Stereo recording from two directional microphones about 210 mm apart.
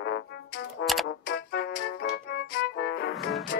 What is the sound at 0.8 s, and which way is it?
Music, centre (ahead or behind).